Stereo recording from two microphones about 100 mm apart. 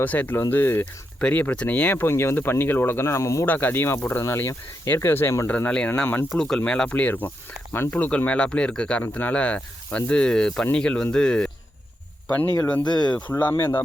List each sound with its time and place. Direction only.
0.0 s speech: 15° left (ahead or behind)
3.4 s speech: 15° left (ahead or behind)
5.5 s speech: 15° left (ahead or behind)
6.3 s speech: 5° left (ahead or behind)
12.8 s speech: 50° left (ahead or behind)
13.4 s speech: 20° left (ahead or behind)